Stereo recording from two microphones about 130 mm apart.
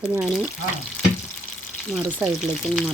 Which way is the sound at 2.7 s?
Centre (ahead or behind).